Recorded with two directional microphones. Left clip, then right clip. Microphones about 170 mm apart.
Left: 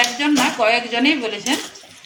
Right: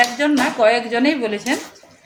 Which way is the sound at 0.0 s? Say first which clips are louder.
Right 1 dB; 55° right (ahead or behind).